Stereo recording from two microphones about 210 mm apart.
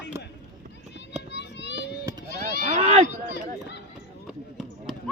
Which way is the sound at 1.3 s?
55° left (ahead or behind).